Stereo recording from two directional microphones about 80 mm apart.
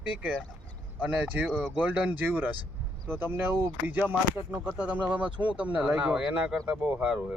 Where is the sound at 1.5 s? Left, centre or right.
Centre.